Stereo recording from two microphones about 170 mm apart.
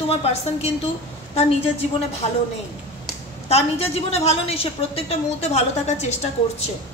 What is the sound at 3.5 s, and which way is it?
A woman's voice, 35° left (ahead or behind).